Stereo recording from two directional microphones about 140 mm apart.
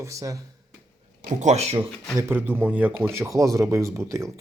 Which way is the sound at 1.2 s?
55° right (ahead or behind).